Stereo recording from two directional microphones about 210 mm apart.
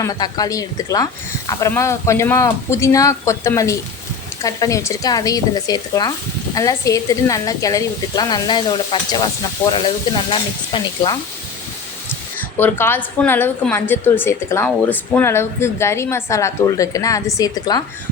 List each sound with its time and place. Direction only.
0.0 s speech: 20° left (ahead or behind)
12.5 s speech: 10° left (ahead or behind)